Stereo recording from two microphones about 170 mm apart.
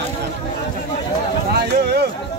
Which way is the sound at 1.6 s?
70° right (ahead or behind).